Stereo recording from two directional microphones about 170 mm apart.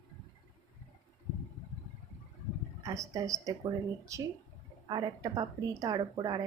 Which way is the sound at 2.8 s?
20° right (ahead or behind).